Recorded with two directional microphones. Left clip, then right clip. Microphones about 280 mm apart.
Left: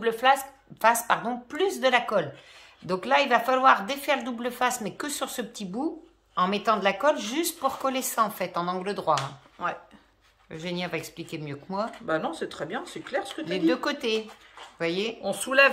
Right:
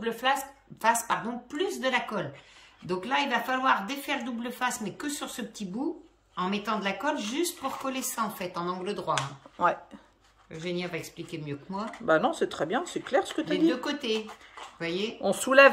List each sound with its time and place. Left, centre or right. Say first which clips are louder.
0.0 s speech: left 5 dB; centre
9.6 s speech: right 5 dB; right
10.5 s speech: left 2 dB; centre
12.1 s speech: right 8 dB; right
13.5 s speech: left 5 dB; centre
15.2 s speech: right 3 dB; right